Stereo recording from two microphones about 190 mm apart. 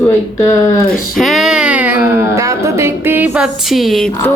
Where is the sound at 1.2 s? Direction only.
Centre (ahead or behind).